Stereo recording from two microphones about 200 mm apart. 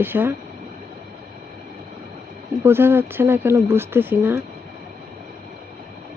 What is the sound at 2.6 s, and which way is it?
Speech, 10° right (ahead or behind).